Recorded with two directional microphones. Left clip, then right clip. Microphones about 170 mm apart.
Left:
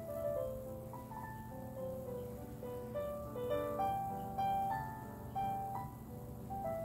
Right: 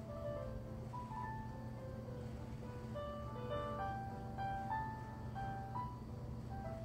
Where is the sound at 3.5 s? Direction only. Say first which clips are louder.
Left 6 dB; 35° left (ahead or behind).